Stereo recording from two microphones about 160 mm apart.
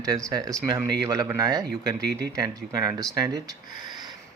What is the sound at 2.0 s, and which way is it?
Speech, 90° right.